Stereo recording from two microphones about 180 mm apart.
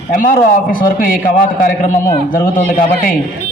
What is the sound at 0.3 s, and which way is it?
Speech, 50° left (ahead or behind).